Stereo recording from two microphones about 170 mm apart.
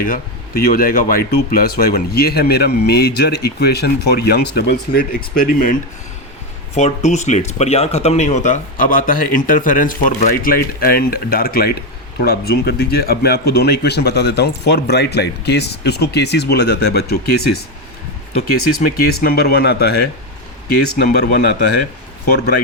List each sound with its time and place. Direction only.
0.0 s speech: 60° left (ahead or behind)
6.7 s speech: 40° left (ahead or behind); by 17.6 s 70° left (ahead or behind)
18.8 s speech: 60° left (ahead or behind)